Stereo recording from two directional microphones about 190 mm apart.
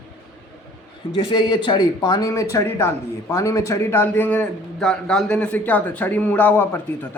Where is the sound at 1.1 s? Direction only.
25° left (ahead or behind).